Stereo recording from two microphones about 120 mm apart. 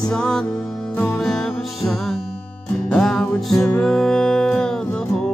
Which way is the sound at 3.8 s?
5° left (ahead or behind).